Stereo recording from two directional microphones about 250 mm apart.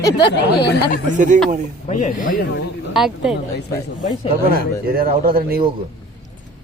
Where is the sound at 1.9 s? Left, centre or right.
Left.